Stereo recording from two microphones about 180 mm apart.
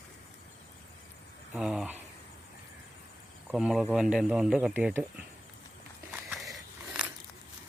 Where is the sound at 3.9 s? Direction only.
5° right (ahead or behind).